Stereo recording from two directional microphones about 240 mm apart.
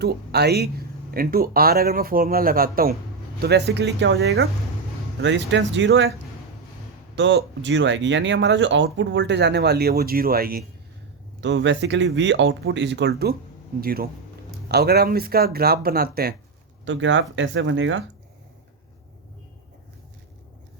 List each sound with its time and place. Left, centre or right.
0.0 s speech: right
7.2 s speech: right
16.8 s speech: right